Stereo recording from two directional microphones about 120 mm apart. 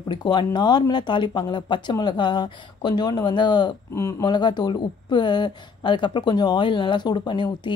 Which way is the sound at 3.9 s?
25° left (ahead or behind).